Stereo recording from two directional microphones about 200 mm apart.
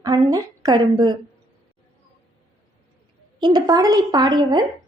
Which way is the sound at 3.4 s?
20° right (ahead or behind).